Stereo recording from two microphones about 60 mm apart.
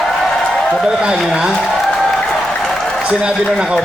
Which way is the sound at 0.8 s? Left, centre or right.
Centre.